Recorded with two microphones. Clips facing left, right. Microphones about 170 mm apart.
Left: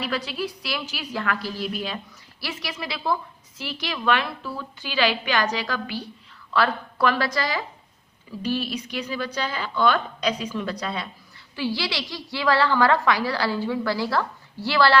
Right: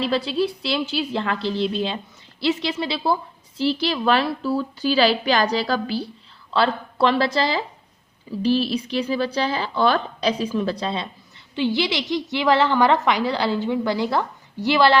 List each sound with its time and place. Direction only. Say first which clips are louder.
0.0 s a woman's voice: right 7 dB; 30° right (ahead or behind)